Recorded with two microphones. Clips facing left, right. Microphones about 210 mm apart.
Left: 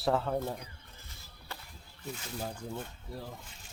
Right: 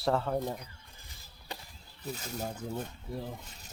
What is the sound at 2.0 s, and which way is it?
Speech, 40° right (ahead or behind).